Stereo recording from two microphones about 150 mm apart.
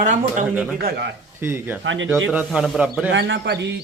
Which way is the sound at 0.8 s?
90° right.